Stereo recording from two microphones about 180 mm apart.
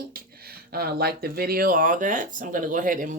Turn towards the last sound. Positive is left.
turn(degrees=-45)  # may be behind; listen again after turning